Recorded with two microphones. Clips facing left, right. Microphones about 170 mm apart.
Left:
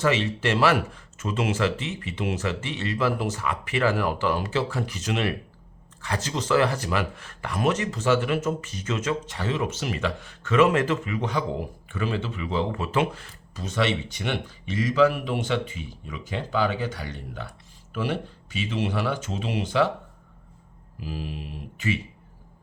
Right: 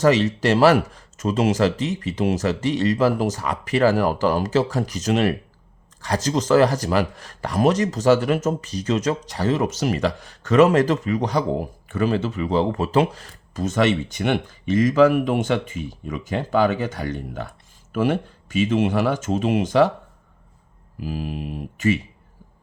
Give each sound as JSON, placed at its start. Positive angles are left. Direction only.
{"t": 0.0, "sound": "speech", "side_deg": -40}
{"t": 21.0, "sound": "speech", "side_deg": -50}